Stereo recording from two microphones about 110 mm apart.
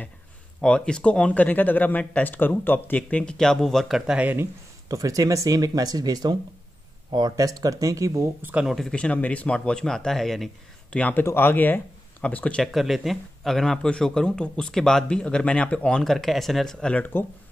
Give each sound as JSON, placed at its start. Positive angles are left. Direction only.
{"t": 0.6, "sound": "speech", "side_deg": 10}
{"t": 4.2, "sound": "speech", "side_deg": -15}
{"t": 4.8, "sound": "speech", "side_deg": -30}
{"t": 8.4, "sound": "speech", "side_deg": -15}
{"t": 8.6, "sound": "speech", "side_deg": 5}
{"t": 12.7, "sound": "speech", "side_deg": 0}